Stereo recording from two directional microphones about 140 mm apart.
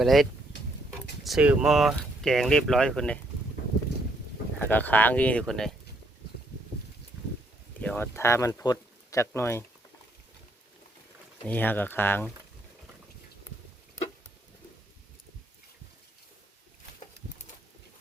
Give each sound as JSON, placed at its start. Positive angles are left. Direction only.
{"t": 0.0, "sound": "speech", "side_deg": 0}
{"t": 4.6, "sound": "speech", "side_deg": 15}
{"t": 7.8, "sound": "speech", "side_deg": 10}
{"t": 11.4, "sound": "speech", "side_deg": 15}